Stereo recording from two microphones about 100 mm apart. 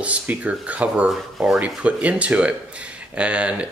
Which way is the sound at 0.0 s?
15° right (ahead or behind).